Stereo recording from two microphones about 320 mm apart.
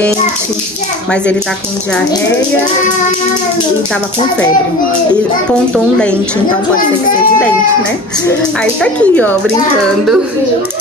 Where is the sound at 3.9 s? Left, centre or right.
Centre.